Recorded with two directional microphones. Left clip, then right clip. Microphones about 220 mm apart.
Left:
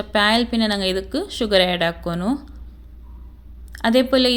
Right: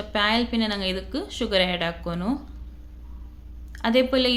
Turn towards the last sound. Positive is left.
turn(degrees=30)  # may be behind; listen again after turning